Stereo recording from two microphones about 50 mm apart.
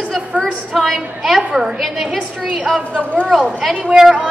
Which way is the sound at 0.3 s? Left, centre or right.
Left.